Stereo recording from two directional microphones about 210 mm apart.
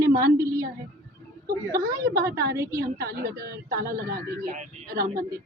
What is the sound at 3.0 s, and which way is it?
Speech, 45° right (ahead or behind).